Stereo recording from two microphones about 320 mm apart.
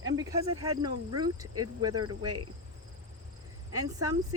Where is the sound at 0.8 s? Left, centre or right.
Right.